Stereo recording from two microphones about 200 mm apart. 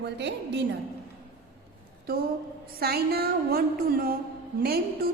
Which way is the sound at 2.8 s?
50° right (ahead or behind).